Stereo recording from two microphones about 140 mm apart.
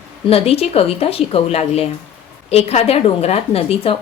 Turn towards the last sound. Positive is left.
turn(degrees=45)  # may be behind; listen again after turning